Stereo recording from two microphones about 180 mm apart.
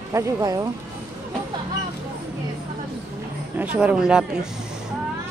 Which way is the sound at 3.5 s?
10° right (ahead or behind).